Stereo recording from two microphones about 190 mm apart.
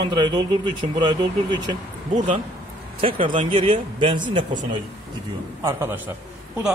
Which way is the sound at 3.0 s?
30° right (ahead or behind).